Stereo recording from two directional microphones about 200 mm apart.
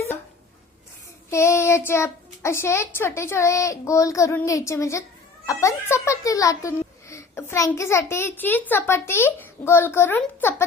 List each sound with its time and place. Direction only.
1.3 s a child's voice: 15° left (ahead or behind)